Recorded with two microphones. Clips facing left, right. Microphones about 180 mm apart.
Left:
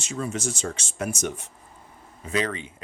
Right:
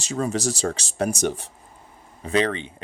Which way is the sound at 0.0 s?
35° right (ahead or behind).